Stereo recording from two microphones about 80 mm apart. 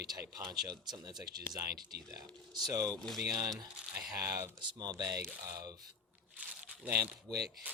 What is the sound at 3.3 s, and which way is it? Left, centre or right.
Speech, right.